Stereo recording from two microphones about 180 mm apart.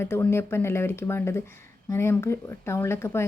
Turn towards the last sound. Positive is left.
turn(degrees=15)  # may be behind; listen again after turning